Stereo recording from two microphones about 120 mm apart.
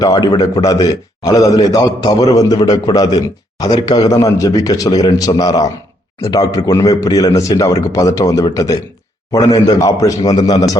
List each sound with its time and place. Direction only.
0.0 s a man's voice: 30° left (ahead or behind)